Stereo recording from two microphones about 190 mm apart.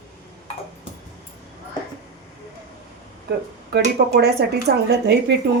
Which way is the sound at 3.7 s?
60° right (ahead or behind).